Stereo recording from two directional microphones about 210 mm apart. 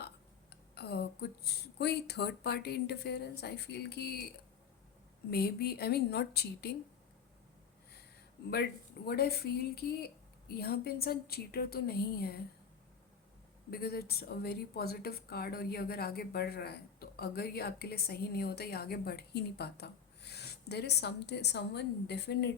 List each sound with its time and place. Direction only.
0.5 s speech: 50° left (ahead or behind)
5.3 s speech: 50° left (ahead or behind)
9.0 s speech: 50° left (ahead or behind)
13.7 s speech: 50° left (ahead or behind)